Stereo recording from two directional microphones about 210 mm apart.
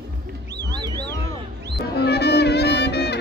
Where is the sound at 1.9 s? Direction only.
50° left (ahead or behind).